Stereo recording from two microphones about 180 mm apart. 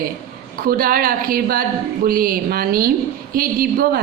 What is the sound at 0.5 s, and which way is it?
Speech, 55° right (ahead or behind).